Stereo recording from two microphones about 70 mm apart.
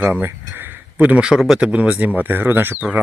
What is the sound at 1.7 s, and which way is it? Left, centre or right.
Speech, right.